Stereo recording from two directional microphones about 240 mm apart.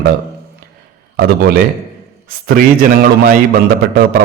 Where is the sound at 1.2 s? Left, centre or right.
Right.